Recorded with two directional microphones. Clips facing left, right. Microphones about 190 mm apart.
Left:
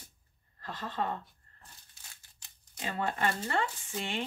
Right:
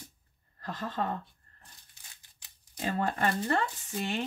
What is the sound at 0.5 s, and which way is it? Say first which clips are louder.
Speech: right 2 dB; 45° right (ahead or behind).